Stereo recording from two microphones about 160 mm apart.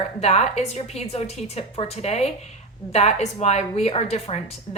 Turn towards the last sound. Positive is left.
turn(degrees=40)  # may be behind; listen again after turning